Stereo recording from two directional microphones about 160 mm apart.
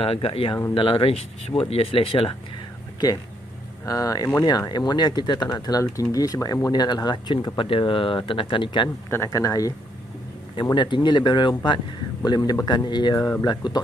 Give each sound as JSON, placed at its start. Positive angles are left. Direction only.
{"t": 0.0, "sound": "speech", "side_deg": 35}
{"t": 3.8, "sound": "speech", "side_deg": 20}
{"t": 9.1, "sound": "speech", "side_deg": 20}